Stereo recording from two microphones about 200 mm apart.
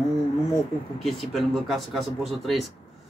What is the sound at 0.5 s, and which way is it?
A man's voice, centre (ahead or behind).